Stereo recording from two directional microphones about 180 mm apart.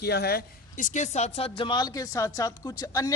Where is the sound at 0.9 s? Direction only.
40° left (ahead or behind).